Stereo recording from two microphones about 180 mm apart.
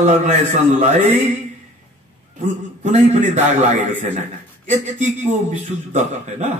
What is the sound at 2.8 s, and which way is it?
Speech, 40° right (ahead or behind).